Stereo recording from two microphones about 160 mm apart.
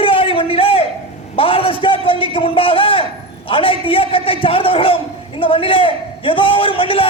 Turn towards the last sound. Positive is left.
turn(degrees=35)  # may be behind; listen again after turning